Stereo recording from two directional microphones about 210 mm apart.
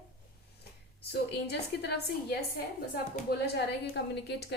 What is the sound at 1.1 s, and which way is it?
A woman's voice, 50° left (ahead or behind).